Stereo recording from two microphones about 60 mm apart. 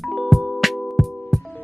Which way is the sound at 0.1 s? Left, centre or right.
Centre.